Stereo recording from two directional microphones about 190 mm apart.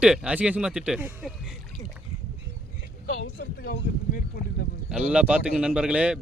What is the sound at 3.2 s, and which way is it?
Speech, 50° left (ahead or behind).